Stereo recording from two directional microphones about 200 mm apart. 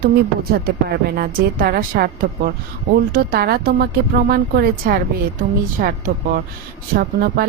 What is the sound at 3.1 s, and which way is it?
A woman's voice, 50° right (ahead or behind).